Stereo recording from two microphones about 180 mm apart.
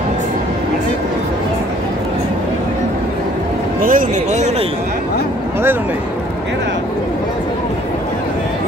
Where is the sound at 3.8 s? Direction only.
50° right (ahead or behind).